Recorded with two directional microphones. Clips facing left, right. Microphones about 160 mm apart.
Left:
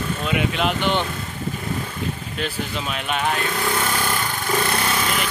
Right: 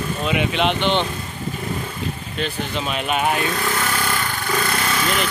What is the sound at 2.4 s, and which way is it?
Speech, centre (ahead or behind).